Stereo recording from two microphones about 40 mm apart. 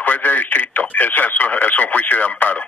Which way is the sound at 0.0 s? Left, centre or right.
Left.